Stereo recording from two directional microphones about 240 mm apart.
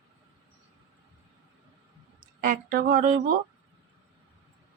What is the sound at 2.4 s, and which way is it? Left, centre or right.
Speech, right.